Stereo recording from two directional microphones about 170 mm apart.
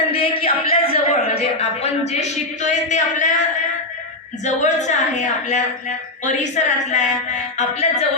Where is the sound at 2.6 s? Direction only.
45° left (ahead or behind).